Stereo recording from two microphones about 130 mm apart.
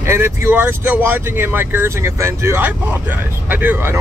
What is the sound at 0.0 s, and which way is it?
Speech, 20° right (ahead or behind).